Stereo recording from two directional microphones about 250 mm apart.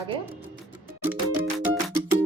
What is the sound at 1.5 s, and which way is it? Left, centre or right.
Music, centre.